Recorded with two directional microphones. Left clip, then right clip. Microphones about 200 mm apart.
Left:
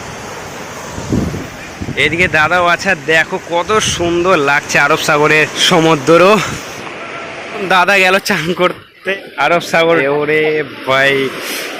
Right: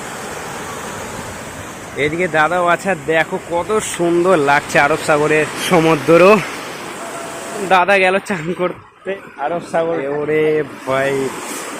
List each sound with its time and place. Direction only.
2.0 s speech: centre (ahead or behind)
7.7 s speech: 5° left (ahead or behind)
9.4 s speech: 20° left (ahead or behind)
10.0 s speech: 5° left (ahead or behind)
10.3 s speech: 10° right (ahead or behind)
10.8 s speech: centre (ahead or behind)